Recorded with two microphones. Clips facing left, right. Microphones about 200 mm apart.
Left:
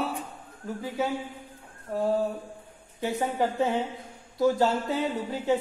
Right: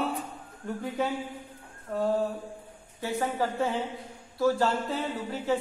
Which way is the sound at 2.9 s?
15° left (ahead or behind).